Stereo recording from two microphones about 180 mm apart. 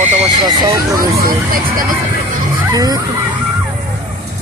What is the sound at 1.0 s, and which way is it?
Speech, 55° right (ahead or behind).